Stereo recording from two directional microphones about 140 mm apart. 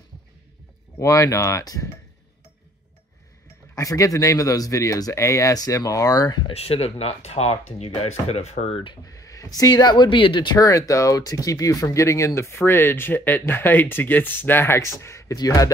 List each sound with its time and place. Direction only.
0.9 s speech: 20° left (ahead or behind)
3.7 s speech: 25° left (ahead or behind)
6.5 s speech: 45° left (ahead or behind)
9.0 s speech: 25° left (ahead or behind)